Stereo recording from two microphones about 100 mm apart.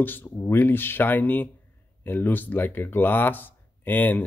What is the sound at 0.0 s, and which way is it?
Speech, 20° left (ahead or behind).